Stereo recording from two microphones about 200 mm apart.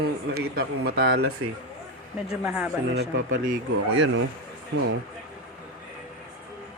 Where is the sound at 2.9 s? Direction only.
55° right (ahead or behind).